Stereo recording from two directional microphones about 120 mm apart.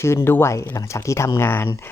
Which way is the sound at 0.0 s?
20° left (ahead or behind).